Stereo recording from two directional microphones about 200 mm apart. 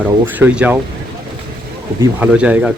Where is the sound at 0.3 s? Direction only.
10° right (ahead or behind).